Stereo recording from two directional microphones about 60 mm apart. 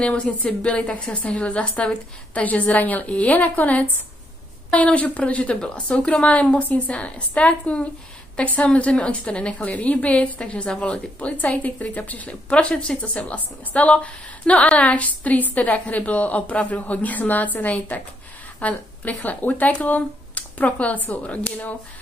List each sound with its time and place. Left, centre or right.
0.0 s a woman's voice: centre